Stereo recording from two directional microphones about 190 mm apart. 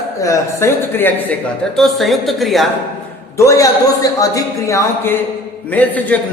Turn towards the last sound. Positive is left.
turn(degrees=10)  # may be behind; listen again after turning